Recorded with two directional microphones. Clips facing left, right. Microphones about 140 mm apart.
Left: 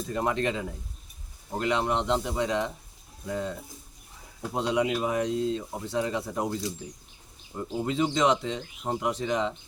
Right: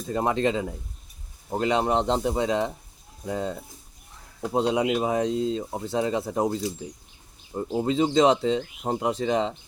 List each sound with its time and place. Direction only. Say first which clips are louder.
0.1 s speech: right 4 dB; 25° right (ahead or behind)
4.5 s speech: right 3 dB; 30° right (ahead or behind)